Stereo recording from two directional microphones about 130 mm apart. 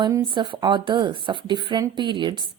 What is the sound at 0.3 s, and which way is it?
A woman's voice, 40° right (ahead or behind).